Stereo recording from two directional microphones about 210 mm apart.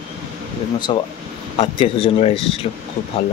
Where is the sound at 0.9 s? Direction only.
25° left (ahead or behind).